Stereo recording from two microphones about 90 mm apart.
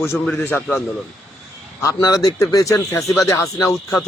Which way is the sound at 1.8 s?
40° left (ahead or behind).